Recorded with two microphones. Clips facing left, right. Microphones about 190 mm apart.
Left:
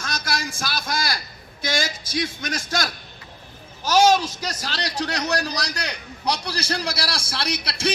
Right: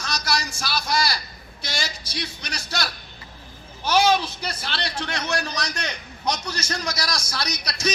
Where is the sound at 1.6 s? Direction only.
50° left (ahead or behind).